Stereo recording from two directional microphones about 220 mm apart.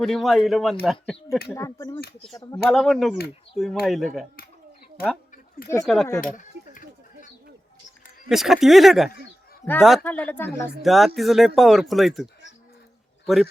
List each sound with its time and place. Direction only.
0.0 s speech: centre (ahead or behind)
1.5 s speech: 15° left (ahead or behind)
2.6 s speech: centre (ahead or behind)
5.8 s speech: centre (ahead or behind)
6.2 s coin: 35° left (ahead or behind)
8.3 s a man's voice: centre (ahead or behind)